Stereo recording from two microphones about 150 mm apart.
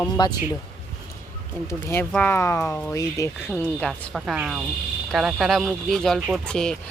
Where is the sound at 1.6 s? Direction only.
15° left (ahead or behind).